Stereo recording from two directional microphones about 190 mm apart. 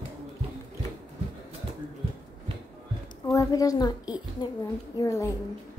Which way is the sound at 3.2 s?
15° left (ahead or behind).